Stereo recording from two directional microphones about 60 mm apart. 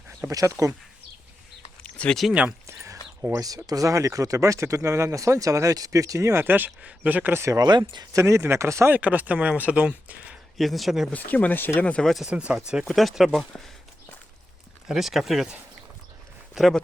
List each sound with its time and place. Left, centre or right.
0.3 s speech: right
1.8 s a sound: centre
3.3 s speech: right
6.4 s speech: right
7.3 s speech: right
8.9 s speech: right
10.6 s speech: centre
11.1 s speech: left
12.3 s speech: right
12.9 s speech: centre
14.8 s speech: centre
16.6 s speech: centre